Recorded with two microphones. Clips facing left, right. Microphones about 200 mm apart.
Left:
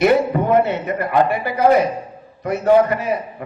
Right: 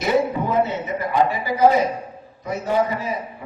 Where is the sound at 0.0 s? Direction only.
60° left (ahead or behind).